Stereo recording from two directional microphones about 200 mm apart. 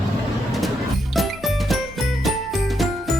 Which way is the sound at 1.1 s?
Centre (ahead or behind).